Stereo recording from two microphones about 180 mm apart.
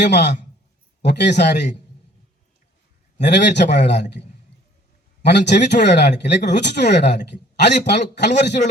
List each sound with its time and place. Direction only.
0.0 s speech: 70° left (ahead or behind)
3.2 s speech: 70° left (ahead or behind)
5.2 s speech: 70° left (ahead or behind)